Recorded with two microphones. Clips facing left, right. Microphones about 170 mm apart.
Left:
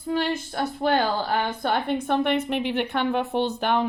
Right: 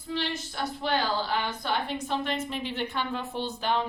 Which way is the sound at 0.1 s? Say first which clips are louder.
Left 7 dB; 50° left (ahead or behind).